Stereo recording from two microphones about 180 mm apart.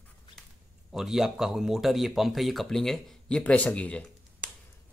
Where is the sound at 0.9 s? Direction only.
Centre (ahead or behind).